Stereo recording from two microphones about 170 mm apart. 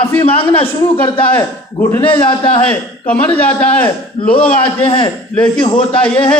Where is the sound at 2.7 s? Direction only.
10° left (ahead or behind).